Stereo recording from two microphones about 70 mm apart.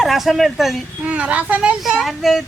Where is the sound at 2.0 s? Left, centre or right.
Centre.